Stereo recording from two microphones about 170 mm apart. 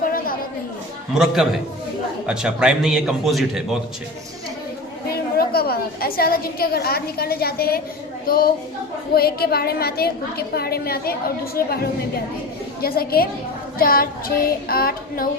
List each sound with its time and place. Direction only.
0.0 s chatter: 55° left (ahead or behind)
1.1 s a man's voice: 5° right (ahead or behind)
5.1 s a woman's voice: 65° left (ahead or behind)